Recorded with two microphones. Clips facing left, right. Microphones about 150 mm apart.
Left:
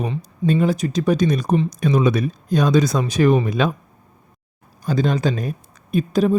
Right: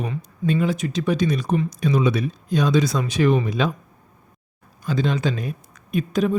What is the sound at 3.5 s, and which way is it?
Speech, 55° left (ahead or behind).